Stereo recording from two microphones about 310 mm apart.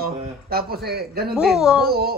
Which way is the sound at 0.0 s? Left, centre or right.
Right.